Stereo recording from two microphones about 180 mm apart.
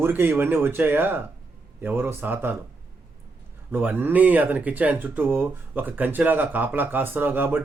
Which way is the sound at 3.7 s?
10° right (ahead or behind).